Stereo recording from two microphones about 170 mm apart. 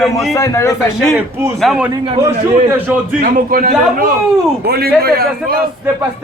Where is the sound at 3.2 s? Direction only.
60° right (ahead or behind).